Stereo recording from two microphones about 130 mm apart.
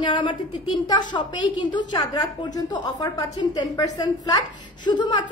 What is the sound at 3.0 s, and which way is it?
A woman's voice, 25° left (ahead or behind).